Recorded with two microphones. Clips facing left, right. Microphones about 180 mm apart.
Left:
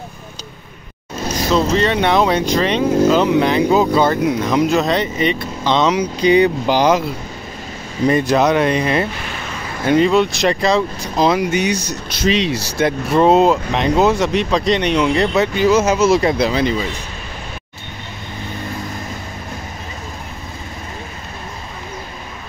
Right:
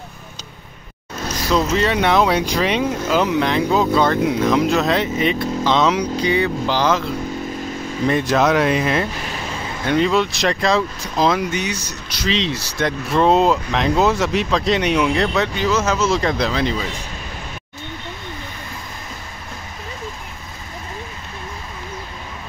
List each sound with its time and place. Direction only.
1.7 s speech: 5° right (ahead or behind)
6.2 s speech: 20° left (ahead or behind)
8.1 s speech: centre (ahead or behind)
11.5 s speech: 15° left (ahead or behind)
12.4 s speech: 10° left (ahead or behind)